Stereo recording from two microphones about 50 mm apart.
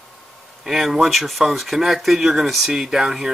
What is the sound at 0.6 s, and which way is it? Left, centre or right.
Speech, centre.